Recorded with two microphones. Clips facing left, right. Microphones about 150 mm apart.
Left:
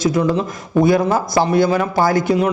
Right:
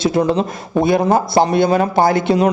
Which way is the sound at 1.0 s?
50° right (ahead or behind).